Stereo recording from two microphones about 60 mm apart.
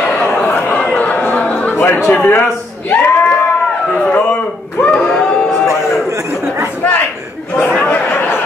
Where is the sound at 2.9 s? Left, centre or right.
Left; by 5.3 s centre.